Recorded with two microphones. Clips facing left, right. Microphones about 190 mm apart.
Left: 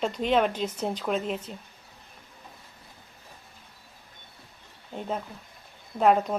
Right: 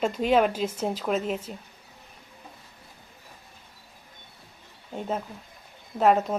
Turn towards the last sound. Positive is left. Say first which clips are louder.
# even
turn(degrees=0)  # may be behind; listen again after turning